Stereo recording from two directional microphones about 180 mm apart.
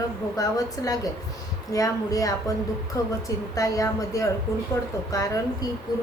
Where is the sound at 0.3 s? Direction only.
20° left (ahead or behind).